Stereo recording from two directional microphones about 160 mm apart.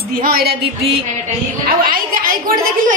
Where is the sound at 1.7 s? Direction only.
65° right (ahead or behind).